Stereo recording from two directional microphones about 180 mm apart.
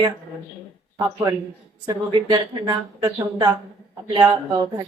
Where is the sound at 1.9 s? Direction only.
25° right (ahead or behind).